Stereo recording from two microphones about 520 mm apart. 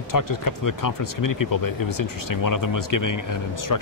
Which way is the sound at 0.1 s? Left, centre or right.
Left.